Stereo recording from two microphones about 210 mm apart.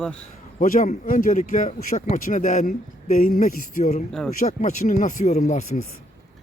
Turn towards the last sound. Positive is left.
turn(degrees=35)  # may be behind; listen again after turning